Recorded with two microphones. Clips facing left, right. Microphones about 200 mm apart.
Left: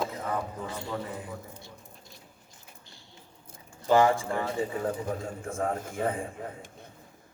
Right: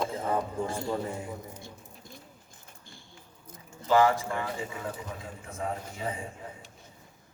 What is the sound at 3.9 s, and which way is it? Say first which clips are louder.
A man's voice: left 1 dB; 30° left (ahead or behind).